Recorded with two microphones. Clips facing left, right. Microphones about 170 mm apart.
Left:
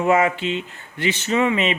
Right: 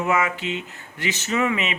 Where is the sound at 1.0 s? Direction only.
30° left (ahead or behind).